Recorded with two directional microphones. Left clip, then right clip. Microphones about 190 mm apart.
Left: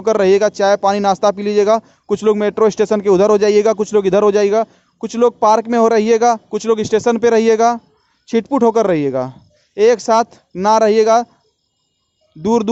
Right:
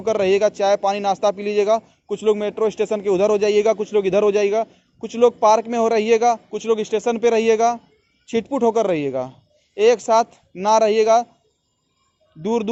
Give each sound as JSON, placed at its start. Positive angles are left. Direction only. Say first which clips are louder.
{"t": 0.0, "sound": "speech", "louder": "left 5 dB", "side_deg": 45}
{"t": 12.4, "sound": "speech", "louder": "left 6 dB", "side_deg": 50}